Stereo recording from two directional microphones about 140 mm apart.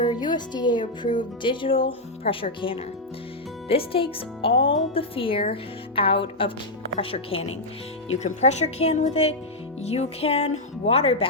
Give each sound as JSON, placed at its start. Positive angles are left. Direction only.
{"t": 0.1, "sound": "speech", "side_deg": 30}
{"t": 8.2, "sound": "speech", "side_deg": 55}